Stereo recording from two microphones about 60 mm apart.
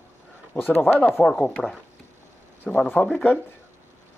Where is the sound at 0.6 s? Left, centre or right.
Left.